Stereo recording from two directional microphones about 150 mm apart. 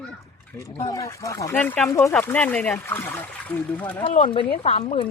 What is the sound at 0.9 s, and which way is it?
Speech, 20° left (ahead or behind).